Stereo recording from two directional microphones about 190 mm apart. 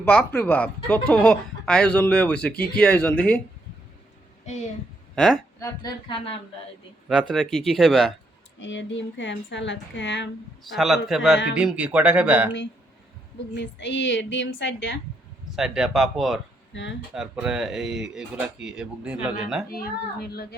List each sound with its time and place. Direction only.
0.0 s speech: 10° left (ahead or behind)
2.5 s speech: 55° left (ahead or behind)
2.8 s speech: 5° left (ahead or behind)
5.1 s speech: centre (ahead or behind)
5.5 s a woman's voice: 15° left (ahead or behind)
7.1 s speech: centre (ahead or behind)
8.6 s a woman's voice: 80° left
10.7 s speech: centre (ahead or behind)
13.5 s a woman's voice: 65° left (ahead or behind)
15.5 s speech: centre (ahead or behind)
16.7 s a woman's voice: 70° left (ahead or behind)
17.2 s speech: 5° right (ahead or behind)
19.7 s speech: 55° left (ahead or behind)